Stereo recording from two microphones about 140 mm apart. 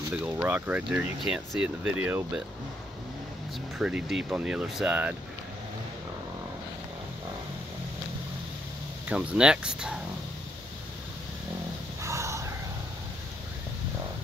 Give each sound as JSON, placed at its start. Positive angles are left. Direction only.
{"t": 0.1, "sound": "speech", "side_deg": -10}
{"t": 3.7, "sound": "speech", "side_deg": -5}
{"t": 9.0, "sound": "speech", "side_deg": -10}
{"t": 12.0, "sound": "a sound", "side_deg": -20}